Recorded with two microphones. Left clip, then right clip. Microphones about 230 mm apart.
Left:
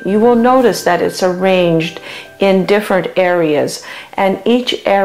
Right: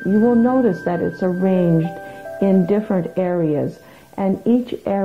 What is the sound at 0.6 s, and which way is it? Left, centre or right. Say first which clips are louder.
A woman's voice: left 8 dB; centre.